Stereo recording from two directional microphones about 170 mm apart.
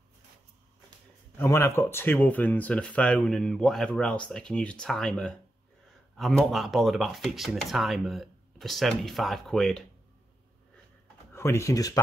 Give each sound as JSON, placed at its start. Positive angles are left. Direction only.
{"t": 1.4, "sound": "speech", "side_deg": 15}
{"t": 11.3, "sound": "speech", "side_deg": 15}